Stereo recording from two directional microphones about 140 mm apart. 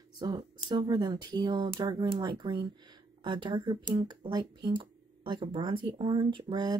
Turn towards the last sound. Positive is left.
turn(degrees=-35)  # may be behind; listen again after turning